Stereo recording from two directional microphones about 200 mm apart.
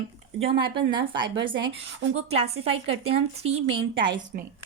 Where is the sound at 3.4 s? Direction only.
30° right (ahead or behind).